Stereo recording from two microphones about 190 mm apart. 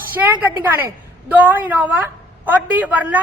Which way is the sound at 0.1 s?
10° right (ahead or behind).